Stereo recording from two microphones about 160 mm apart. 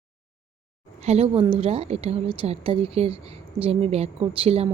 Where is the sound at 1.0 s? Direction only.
40° right (ahead or behind).